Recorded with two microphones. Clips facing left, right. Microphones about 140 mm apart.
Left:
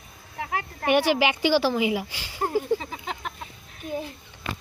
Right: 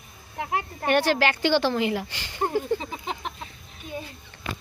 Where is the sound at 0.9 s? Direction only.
10° left (ahead or behind).